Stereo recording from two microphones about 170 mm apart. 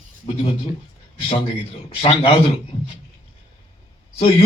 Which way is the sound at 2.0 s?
35° left (ahead or behind).